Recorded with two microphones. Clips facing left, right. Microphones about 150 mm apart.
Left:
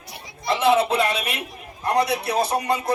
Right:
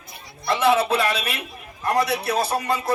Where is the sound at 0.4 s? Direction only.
25° left (ahead or behind).